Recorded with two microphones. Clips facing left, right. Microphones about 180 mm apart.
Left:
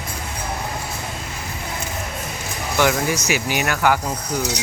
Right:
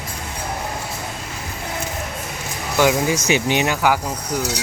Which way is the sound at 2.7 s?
15° right (ahead or behind).